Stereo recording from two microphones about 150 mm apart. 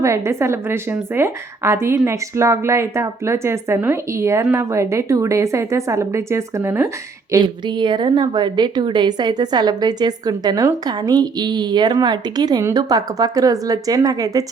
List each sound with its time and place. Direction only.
0.0 s a woman's voice: 20° right (ahead or behind)
7.4 s a woman's voice: 30° right (ahead or behind)